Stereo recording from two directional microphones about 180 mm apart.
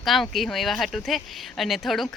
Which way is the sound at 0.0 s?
Centre (ahead or behind).